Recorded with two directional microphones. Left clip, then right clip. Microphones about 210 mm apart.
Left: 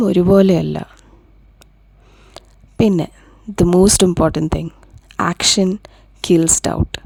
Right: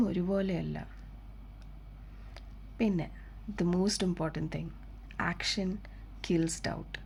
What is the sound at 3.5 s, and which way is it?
Speech, 60° left (ahead or behind).